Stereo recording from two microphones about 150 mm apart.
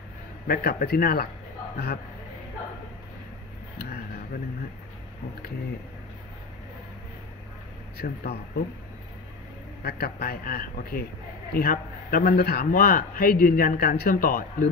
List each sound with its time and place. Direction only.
0.5 s a man's voice: 90° left
8.0 s a man's voice: 90° left
9.8 s a man's voice: 90° left; by 14.7 s 70° left (ahead or behind)